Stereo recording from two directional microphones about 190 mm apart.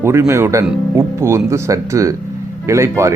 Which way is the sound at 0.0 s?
15° right (ahead or behind).